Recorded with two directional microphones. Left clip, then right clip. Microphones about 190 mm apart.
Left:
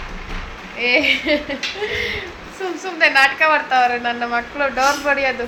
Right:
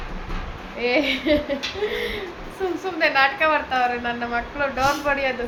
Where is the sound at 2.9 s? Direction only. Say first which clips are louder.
Left 6 dB; 10° left (ahead or behind).